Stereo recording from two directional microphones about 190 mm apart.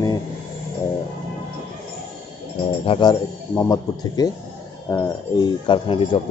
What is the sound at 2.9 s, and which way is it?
Speech, 20° left (ahead or behind).